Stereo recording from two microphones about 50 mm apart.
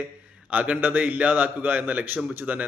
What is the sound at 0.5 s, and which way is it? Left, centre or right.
Speech, right.